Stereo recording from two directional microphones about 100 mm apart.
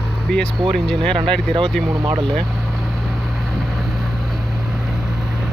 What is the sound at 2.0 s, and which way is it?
Speech, 50° right (ahead or behind).